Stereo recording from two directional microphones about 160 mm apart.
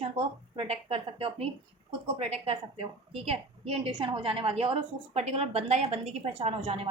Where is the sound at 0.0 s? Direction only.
40° right (ahead or behind).